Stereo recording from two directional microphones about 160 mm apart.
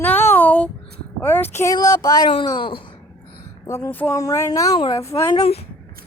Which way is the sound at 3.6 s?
20° left (ahead or behind).